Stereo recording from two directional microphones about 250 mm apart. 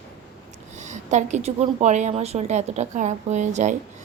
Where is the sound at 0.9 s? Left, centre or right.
Right.